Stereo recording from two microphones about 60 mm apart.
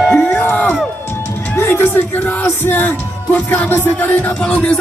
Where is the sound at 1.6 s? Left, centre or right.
Left.